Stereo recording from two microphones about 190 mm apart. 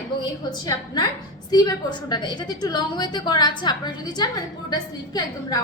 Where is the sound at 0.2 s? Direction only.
20° left (ahead or behind).